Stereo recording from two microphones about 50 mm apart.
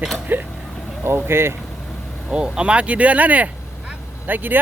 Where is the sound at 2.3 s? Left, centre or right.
Centre.